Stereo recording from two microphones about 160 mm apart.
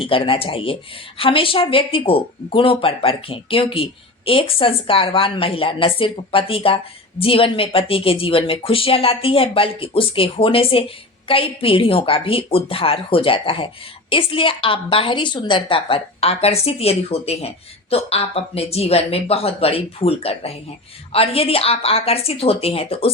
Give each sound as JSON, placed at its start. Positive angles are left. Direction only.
{"t": 0.0, "sound": "speech", "side_deg": 35}